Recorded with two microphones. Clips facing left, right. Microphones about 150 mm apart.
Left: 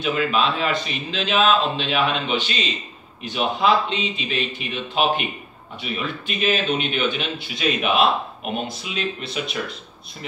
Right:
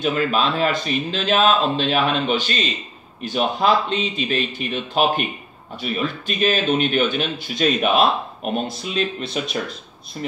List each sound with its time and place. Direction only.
0.0 s speech: 40° right (ahead or behind)